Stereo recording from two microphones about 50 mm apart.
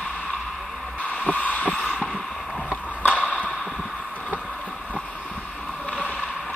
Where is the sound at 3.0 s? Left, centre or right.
Left.